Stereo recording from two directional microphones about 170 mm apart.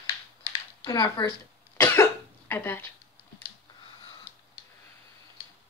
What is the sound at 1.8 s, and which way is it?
Cough, 15° left (ahead or behind).